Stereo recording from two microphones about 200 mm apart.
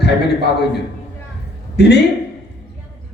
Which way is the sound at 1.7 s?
55° left (ahead or behind).